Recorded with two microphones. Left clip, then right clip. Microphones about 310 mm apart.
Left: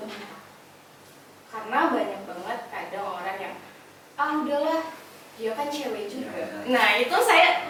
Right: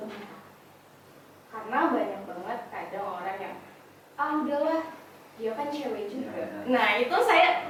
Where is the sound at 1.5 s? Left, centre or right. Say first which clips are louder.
Left 3 dB; centre.